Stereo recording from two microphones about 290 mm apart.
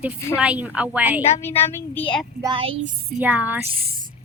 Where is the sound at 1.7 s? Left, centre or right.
Centre.